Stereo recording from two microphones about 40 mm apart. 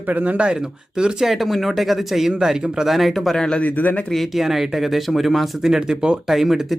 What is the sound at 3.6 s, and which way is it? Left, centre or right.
Speech, left.